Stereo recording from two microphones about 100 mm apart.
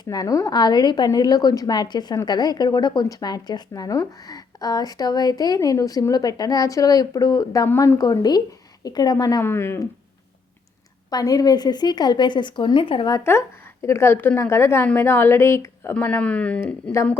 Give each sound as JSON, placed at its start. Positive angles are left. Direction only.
{"t": 0.0, "sound": "speech", "side_deg": 40}
{"t": 9.4, "sound": "speech", "side_deg": 25}
{"t": 11.1, "sound": "a woman's voice", "side_deg": 40}
{"t": 13.3, "sound": "speech", "side_deg": 25}
{"t": 16.0, "sound": "a man's voice", "side_deg": 15}